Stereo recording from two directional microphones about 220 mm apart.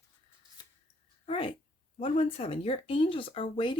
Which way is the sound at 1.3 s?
25° left (ahead or behind).